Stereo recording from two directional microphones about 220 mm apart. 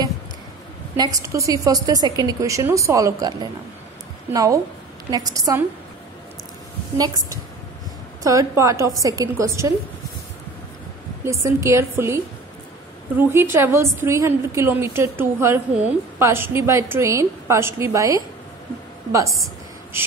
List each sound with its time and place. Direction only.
0.9 s a woman's voice: 15° right (ahead or behind)
8.2 s a woman's voice: 15° right (ahead or behind)
11.2 s a woman's voice: 15° right (ahead or behind)
13.2 s a woman's voice: 10° right (ahead or behind)